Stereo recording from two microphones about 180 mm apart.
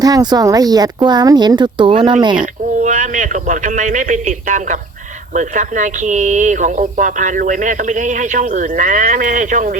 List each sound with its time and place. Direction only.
0.0 s speech: 20° right (ahead or behind)
2.4 s speech: 45° right (ahead or behind)